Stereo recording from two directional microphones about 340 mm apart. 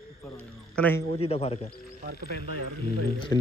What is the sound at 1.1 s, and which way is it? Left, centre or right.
Speech, centre.